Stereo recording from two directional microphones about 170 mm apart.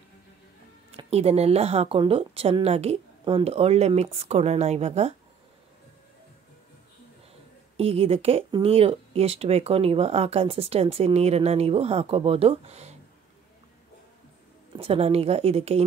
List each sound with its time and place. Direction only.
0.9 s speech: 40° right (ahead or behind)
7.7 s speech: 35° right (ahead or behind)
14.8 s speech: 35° right (ahead or behind)